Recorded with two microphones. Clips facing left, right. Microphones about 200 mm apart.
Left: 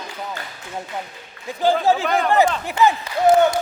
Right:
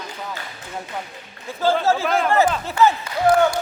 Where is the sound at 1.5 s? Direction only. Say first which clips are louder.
Left 1 dB; 15° left (ahead or behind).